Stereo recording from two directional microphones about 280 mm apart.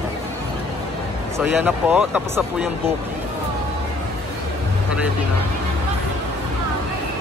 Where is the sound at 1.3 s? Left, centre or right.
Centre.